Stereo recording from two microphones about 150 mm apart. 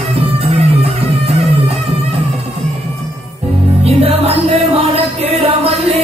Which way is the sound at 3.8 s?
40° right (ahead or behind).